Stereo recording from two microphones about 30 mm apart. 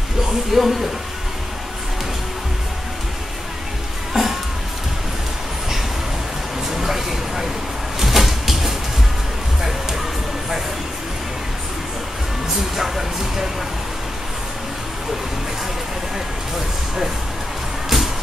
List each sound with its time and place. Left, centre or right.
0.5 s speech: centre
4.1 s music: centre
6.7 s a sound: centre
8.0 s cupboard open or close: centre
12.7 s vehicle: centre
17.8 s music: centre